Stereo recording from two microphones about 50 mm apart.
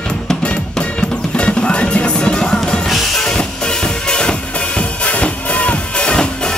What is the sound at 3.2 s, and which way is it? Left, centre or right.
Music, centre.